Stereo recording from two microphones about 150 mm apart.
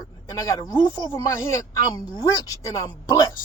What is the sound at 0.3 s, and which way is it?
Speech, 20° left (ahead or behind).